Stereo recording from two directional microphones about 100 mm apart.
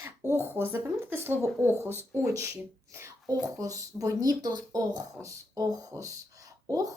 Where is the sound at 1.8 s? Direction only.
25° left (ahead or behind).